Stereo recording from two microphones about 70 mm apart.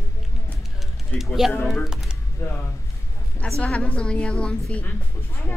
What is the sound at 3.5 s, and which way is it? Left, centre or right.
A woman's voice, centre.